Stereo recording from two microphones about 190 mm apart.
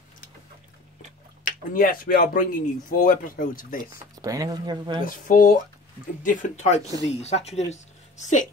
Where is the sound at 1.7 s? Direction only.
45° left (ahead or behind).